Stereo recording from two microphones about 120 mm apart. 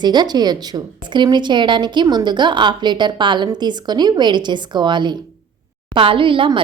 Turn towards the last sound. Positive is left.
turn(degrees=-45)  # may be behind; listen again after turning